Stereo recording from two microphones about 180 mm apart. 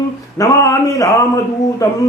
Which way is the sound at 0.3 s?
15° left (ahead or behind).